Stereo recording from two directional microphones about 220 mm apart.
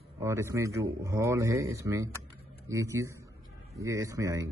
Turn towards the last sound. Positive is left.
turn(degrees=-15)  # may be behind; listen again after turning